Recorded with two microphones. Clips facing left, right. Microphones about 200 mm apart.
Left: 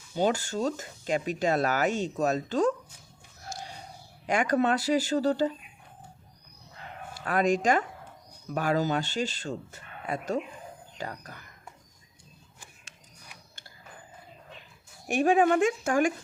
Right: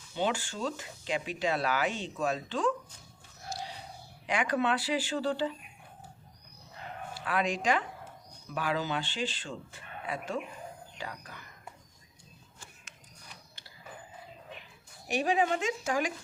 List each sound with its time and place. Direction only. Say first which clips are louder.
0.2 s speech: left 5 dB; 40° left (ahead or behind)
3.5 s a sound: right 1 dB; 50° left (ahead or behind)
4.3 s speech: left 4 dB; 45° left (ahead or behind)
7.1 s speech: left 6 dB; 45° left (ahead or behind)
15.0 s speech: left 6 dB; 50° left (ahead or behind)